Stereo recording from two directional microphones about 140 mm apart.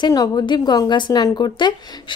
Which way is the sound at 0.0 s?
30° left (ahead or behind).